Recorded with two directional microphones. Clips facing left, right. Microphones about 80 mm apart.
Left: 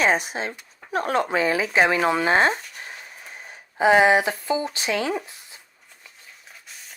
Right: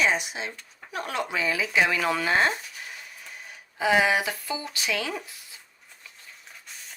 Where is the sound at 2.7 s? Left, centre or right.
Left.